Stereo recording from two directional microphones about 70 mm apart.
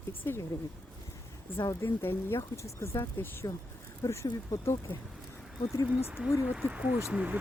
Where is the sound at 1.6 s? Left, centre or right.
Left.